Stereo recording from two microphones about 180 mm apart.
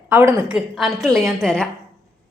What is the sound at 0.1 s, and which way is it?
Speech, 15° right (ahead or behind).